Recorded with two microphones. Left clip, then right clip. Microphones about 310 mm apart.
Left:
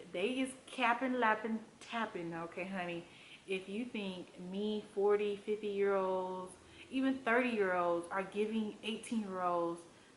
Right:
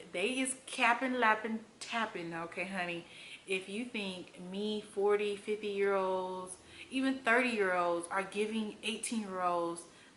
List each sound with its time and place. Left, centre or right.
0.1 s a woman's voice: centre
6.1 s a sound: centre
6.9 s a woman's voice: centre